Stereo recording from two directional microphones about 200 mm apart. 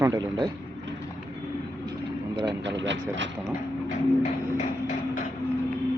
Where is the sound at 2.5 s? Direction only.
60° right (ahead or behind).